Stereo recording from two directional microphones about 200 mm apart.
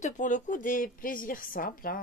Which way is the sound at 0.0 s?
40° left (ahead or behind).